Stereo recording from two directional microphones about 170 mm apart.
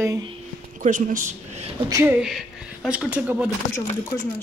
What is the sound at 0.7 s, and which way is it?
Speech, 50° right (ahead or behind).